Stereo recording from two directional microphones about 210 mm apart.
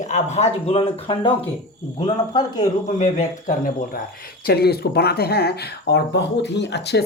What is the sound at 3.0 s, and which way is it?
Speech, 35° left (ahead or behind).